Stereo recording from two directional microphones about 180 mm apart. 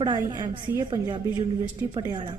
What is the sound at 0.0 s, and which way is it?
A woman's voice, 25° right (ahead or behind).